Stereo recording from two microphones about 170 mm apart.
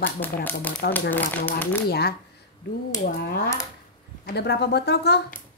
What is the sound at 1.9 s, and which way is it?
Speech, 70° left (ahead or behind).